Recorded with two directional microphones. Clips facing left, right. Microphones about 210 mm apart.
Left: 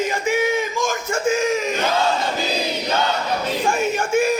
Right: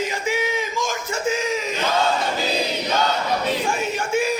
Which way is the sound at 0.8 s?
50° left (ahead or behind).